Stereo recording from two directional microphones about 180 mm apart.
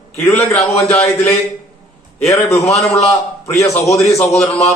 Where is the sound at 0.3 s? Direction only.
15° left (ahead or behind).